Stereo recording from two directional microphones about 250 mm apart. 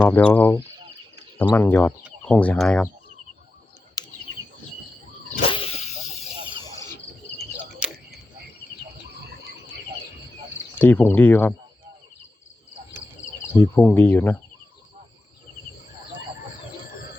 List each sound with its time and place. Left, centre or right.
0.0 s speech: centre
5.5 s vehicle: left
7.3 s a sound: centre
10.8 s speech: centre
13.5 s speech: centre